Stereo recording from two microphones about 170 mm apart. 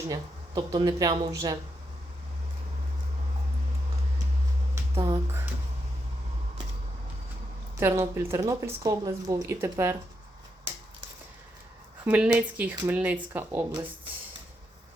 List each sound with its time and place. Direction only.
0.1 s speech: 25° right (ahead or behind)
4.9 s speech: 30° right (ahead or behind)
7.8 s speech: 15° right (ahead or behind)
12.0 s speech: 10° right (ahead or behind)